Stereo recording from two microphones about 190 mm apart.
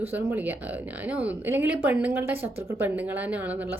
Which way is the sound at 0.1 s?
10° right (ahead or behind).